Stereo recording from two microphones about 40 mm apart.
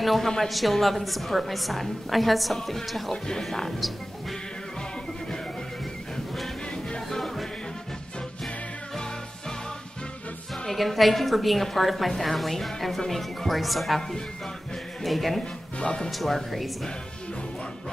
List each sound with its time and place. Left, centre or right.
0.0 s a woman's voice: centre
7.1 s music: centre
10.7 s a woman's voice: centre
15.0 s a woman's voice: centre
15.8 s speech: left
16.1 s a woman's voice: centre